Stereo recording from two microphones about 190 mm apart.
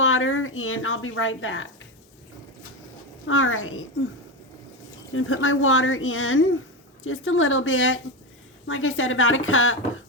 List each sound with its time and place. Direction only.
0.0 s speech: 90° left
3.2 s speech: 90° left
5.1 s speech: 90° left